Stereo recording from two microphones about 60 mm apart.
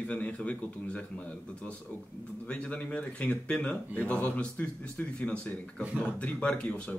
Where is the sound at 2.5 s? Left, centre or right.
Left.